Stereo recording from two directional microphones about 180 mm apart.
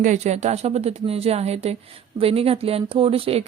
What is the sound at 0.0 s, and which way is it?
A woman's voice, 40° right (ahead or behind).